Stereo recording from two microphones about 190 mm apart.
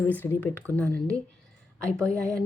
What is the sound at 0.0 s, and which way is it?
A woman's voice, 10° left (ahead or behind).